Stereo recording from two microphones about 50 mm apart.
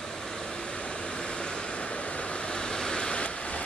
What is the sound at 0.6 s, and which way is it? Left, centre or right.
Vehicle, left.